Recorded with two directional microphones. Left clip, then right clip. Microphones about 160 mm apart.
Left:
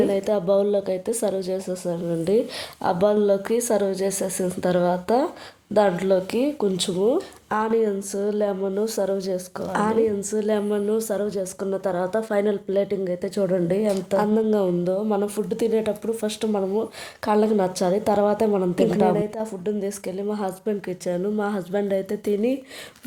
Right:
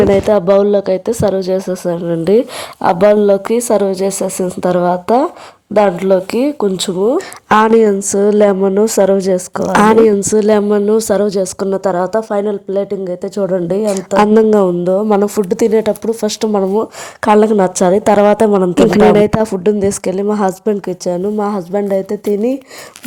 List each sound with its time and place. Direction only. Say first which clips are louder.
0.1 s speech: right 11 dB; 35° right (ahead or behind)
7.2 s speech: right 14 dB; 55° right (ahead or behind); by 12.4 s 35° right (ahead or behind)
12.4 s a woman's voice: right 6 dB; 20° right (ahead or behind); by 18.7 s 35° right (ahead or behind)
18.8 s speech: right 14 dB; 50° right (ahead or behind); by 22.5 s 30° right (ahead or behind)